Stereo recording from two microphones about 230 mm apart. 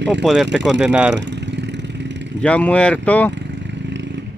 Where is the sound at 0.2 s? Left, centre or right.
Centre.